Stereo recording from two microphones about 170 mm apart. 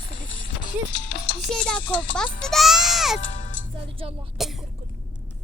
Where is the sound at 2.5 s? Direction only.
Centre (ahead or behind).